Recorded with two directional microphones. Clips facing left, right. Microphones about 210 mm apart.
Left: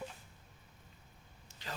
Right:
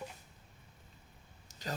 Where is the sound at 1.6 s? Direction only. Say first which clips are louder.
Right 6 dB; 40° right (ahead or behind).